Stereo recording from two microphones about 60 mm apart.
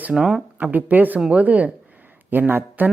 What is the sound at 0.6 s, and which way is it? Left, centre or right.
Speech, right.